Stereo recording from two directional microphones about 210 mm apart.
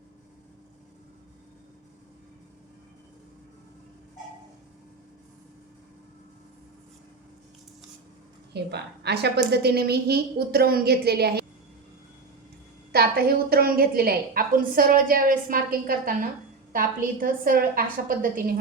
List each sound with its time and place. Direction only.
8.5 s a woman's voice: 50° right (ahead or behind)
12.9 s a woman's voice: 50° right (ahead or behind)